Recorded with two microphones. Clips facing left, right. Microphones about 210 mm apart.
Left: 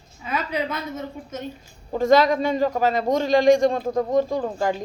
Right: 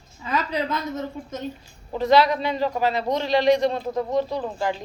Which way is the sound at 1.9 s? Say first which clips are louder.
Left 2 dB; 45° left (ahead or behind).